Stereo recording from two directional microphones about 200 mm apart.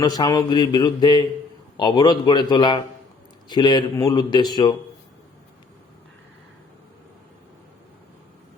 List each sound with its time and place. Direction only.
0.0 s mantra: 20° left (ahead or behind)